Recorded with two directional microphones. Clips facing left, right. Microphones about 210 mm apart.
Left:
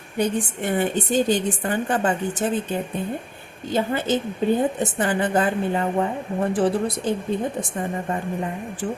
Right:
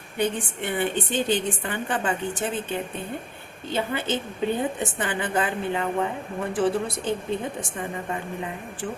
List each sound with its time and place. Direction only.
0.2 s a woman's voice: 40° left (ahead or behind)